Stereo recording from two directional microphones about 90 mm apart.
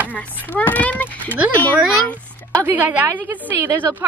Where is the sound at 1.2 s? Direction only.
15° right (ahead or behind).